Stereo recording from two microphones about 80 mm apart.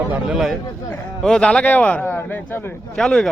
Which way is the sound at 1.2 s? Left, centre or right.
Centre.